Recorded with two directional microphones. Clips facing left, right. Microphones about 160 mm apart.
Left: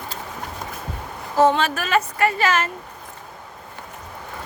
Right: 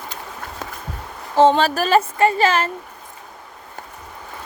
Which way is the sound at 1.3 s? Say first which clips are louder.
Right 3 dB; 30° right (ahead or behind).